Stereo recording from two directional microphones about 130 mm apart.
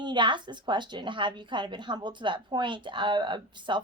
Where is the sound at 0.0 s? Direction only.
35° right (ahead or behind).